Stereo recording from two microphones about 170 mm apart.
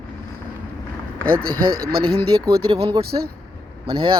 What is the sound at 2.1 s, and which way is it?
Speech, 35° right (ahead or behind).